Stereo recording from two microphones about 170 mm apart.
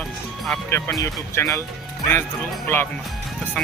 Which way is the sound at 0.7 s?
15° left (ahead or behind).